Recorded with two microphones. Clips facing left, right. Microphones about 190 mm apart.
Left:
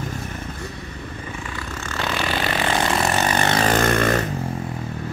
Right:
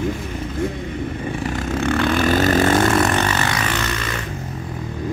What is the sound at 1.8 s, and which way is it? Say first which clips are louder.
Vehicle: right 8 dB; 55° right (ahead or behind).